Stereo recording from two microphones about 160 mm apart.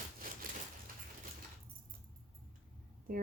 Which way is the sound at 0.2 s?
60° right (ahead or behind).